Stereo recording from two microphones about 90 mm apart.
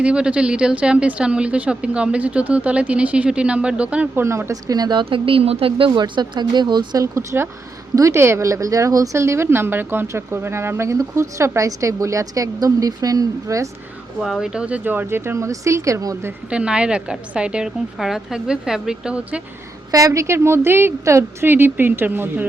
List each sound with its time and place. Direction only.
0.0 s a woman's voice: 10° right (ahead or behind)
4.2 s speech: 30° right (ahead or behind); by 5.0 s 50° right (ahead or behind)
5.0 s a woman's voice: 85° right; by 13.7 s 40° right (ahead or behind)
14.2 s a woman's voice: centre (ahead or behind)
14.8 s a woman's voice: 25° right (ahead or behind)
16.5 s a woman's voice: 10° right (ahead or behind)
19.9 s a woman's voice: 40° right (ahead or behind); by 22.4 s 20° right (ahead or behind)